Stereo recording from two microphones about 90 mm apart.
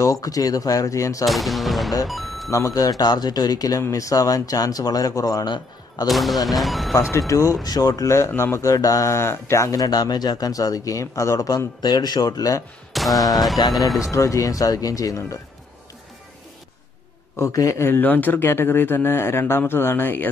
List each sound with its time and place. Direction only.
0.0 s speech: 40° left (ahead or behind)
1.2 s speech: centre (ahead or behind)
2.0 s music: centre (ahead or behind)
2.5 s speech: 40° left (ahead or behind)
6.0 s speech: centre (ahead or behind)
7.0 s speech: 35° left (ahead or behind)
8.3 s speech: 25° left (ahead or behind); by 12.6 s 40° left (ahead or behind)
12.9 s a sound: centre (ahead or behind)
13.6 s speech: 50° left (ahead or behind)
14.1 s speech: 35° left (ahead or behind)
17.4 s speech: 35° left (ahead or behind)